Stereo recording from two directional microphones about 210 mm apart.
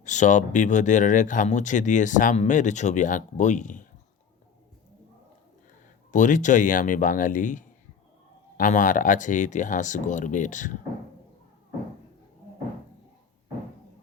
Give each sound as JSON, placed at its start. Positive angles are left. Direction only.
{"t": 0.0, "sound": "speech", "side_deg": 35}
{"t": 6.1, "sound": "speech", "side_deg": 35}